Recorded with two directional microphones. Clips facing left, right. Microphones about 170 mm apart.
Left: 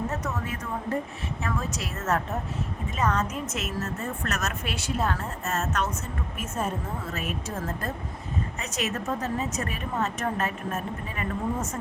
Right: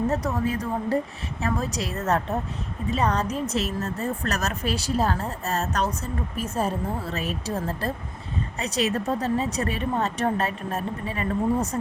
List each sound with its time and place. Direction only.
0.1 s speech: 35° right (ahead or behind)